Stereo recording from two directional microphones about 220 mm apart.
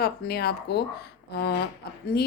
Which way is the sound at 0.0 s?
45° left (ahead or behind).